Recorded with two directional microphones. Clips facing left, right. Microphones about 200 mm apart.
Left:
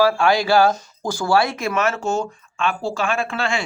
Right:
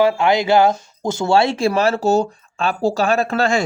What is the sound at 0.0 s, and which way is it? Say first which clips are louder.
Speech: right 2 dB; 20° right (ahead or behind).